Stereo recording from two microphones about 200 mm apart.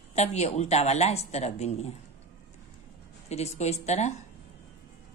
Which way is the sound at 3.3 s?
35° left (ahead or behind).